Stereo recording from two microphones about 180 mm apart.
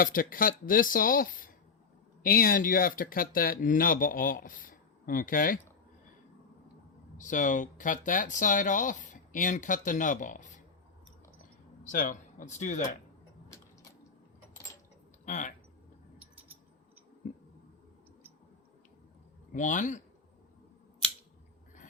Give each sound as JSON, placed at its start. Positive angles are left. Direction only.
{"t": 0.0, "sound": "speech", "side_deg": 50}
{"t": 7.2, "sound": "speech", "side_deg": 45}
{"t": 11.9, "sound": "speech", "side_deg": 45}
{"t": 15.2, "sound": "speech", "side_deg": 45}
{"t": 16.1, "sound": "a sound", "side_deg": -10}
{"t": 19.5, "sound": "speech", "side_deg": 45}